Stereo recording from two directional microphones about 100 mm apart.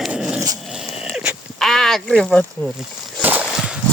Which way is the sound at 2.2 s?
5° left (ahead or behind).